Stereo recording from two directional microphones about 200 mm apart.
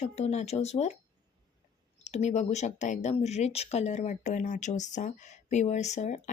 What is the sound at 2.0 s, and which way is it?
Speech, 35° left (ahead or behind).